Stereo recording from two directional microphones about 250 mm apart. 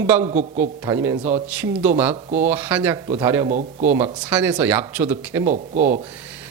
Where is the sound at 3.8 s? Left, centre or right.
Centre.